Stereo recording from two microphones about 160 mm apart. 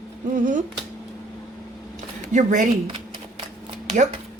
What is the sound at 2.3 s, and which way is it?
Speech, 50° right (ahead or behind).